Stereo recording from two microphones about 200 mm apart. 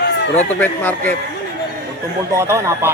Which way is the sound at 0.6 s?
10° left (ahead or behind).